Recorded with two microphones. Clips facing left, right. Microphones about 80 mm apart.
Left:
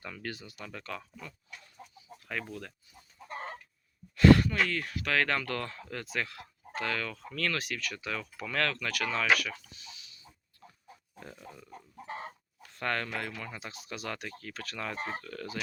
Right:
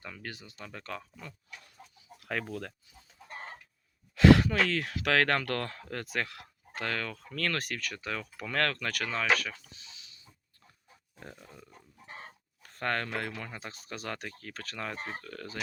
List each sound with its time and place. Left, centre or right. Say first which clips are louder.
0.0 s speech: left 3 dB; centre; by 1.3 s right
2.2 s speech: right 3 dB; right
4.1 s speech: even; right
9.1 s speech: left 1 dB; right
11.2 s speech: even; right
12.6 s speech: right 1 dB; right